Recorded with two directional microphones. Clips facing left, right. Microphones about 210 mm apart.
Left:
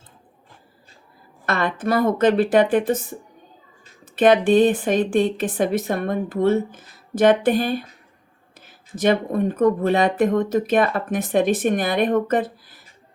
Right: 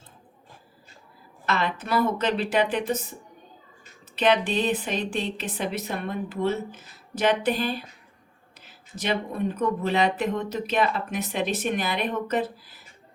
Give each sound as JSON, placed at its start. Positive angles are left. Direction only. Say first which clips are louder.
{"t": 1.5, "sound": "a woman's voice", "louder": "left 5 dB", "side_deg": 50}
{"t": 9.0, "sound": "a woman's voice", "louder": "left 8 dB", "side_deg": 50}